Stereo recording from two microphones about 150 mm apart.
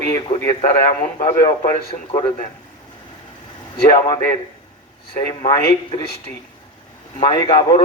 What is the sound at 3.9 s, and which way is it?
Speech, 25° left (ahead or behind).